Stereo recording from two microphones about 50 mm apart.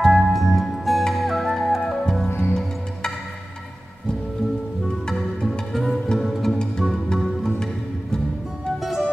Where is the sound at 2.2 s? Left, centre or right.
Left.